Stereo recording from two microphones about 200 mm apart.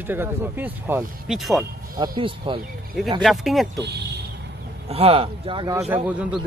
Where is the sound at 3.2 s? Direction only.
Centre (ahead or behind).